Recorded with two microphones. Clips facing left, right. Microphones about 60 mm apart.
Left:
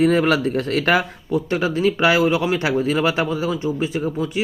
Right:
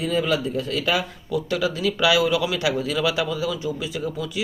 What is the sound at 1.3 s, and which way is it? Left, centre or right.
Speech, left.